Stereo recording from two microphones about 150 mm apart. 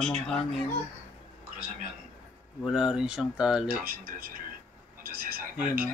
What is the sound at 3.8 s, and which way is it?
Speech, 70° right (ahead or behind).